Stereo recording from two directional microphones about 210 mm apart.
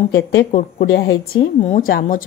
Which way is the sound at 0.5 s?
40° left (ahead or behind).